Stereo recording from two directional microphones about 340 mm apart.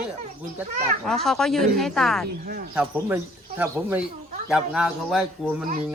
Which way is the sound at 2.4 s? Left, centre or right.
Right.